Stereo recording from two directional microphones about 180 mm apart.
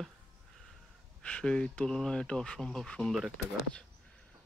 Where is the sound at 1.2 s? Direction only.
5° left (ahead or behind).